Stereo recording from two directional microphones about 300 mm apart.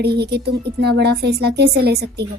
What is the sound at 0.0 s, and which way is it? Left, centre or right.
Speech, right.